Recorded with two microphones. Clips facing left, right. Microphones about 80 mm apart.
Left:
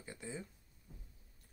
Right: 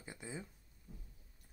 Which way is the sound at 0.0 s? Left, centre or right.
Centre.